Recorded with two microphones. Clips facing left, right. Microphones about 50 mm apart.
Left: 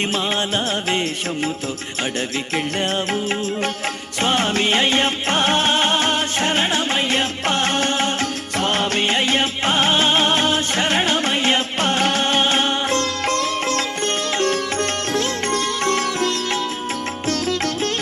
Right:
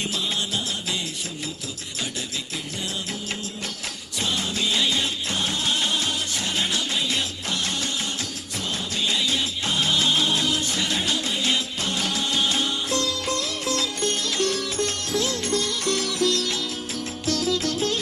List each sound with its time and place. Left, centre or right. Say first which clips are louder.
0.1 s music: left 7 dB; left
2.7 s music: left 9 dB; left
4.2 s music: left 8 dB; left